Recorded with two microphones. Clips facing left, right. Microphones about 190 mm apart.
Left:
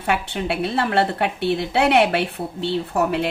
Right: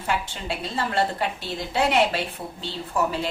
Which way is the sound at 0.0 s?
65° left (ahead or behind).